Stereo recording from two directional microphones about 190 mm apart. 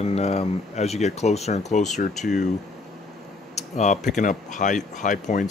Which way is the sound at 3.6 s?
40° left (ahead or behind).